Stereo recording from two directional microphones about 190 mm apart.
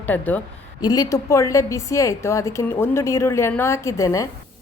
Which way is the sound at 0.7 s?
20° left (ahead or behind).